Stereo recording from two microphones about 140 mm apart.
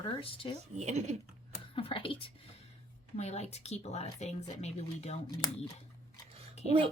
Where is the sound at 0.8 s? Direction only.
55° right (ahead or behind).